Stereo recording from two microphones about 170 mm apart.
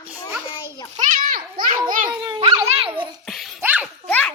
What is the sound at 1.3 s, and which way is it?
Children playing, 55° right (ahead or behind).